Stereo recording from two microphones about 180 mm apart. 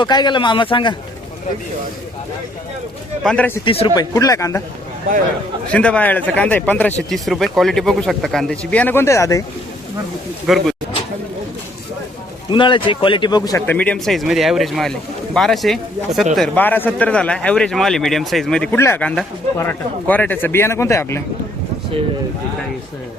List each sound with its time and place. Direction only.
0.0 s a man's voice: 25° left (ahead or behind)
3.2 s a man's voice: 10° left (ahead or behind)
3.6 s a man's voice: 30° left (ahead or behind)
5.6 s a man's voice: 5° left (ahead or behind)
10.4 s speech: centre (ahead or behind)
12.5 s a man's voice: 25° left (ahead or behind)
13.7 s a man's voice: 5° left (ahead or behind)